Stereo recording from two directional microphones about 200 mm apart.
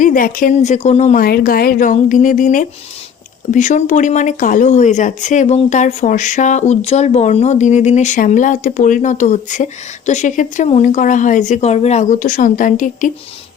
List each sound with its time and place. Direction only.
0.0 s speech: 45° left (ahead or behind)